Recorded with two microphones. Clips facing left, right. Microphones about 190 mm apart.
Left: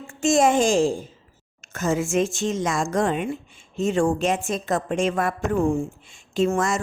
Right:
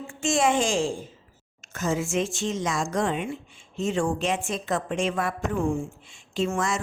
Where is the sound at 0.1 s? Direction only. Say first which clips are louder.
Left 5 dB; 40° left (ahead or behind).